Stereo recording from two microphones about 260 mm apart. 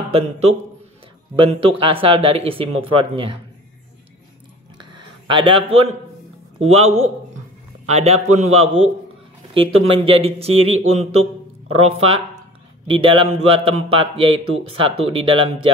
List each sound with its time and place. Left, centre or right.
0.1 s speech: right
4.9 s a man's voice: centre
9.9 s speech: right